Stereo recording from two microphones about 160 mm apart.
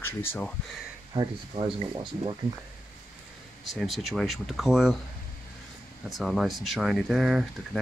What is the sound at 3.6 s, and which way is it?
Speech, centre (ahead or behind).